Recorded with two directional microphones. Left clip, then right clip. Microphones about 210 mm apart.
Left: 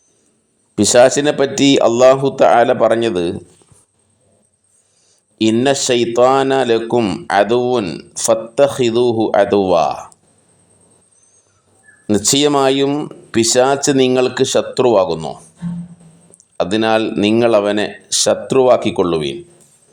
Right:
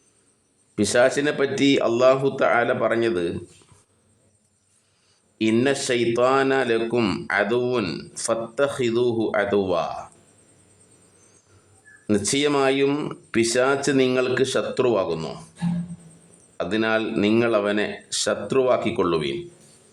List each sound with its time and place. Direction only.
0.8 s speech: 20° left (ahead or behind)
5.6 s speech: 20° left (ahead or behind)
6.8 s speech: 5° left (ahead or behind)
7.3 s speech: 20° left (ahead or behind)
12.1 s speech: 20° left (ahead or behind)
12.9 s speech: 10° left (ahead or behind)
13.3 s speech: 20° left (ahead or behind)
16.6 s speech: 20° left (ahead or behind)